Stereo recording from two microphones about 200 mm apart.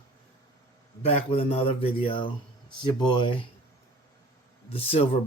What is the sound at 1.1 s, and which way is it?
Speech, 30° left (ahead or behind).